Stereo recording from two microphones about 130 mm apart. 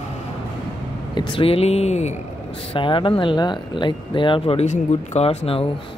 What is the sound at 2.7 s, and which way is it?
Speech, 40° left (ahead or behind).